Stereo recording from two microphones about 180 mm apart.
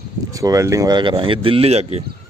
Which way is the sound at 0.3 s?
20° right (ahead or behind).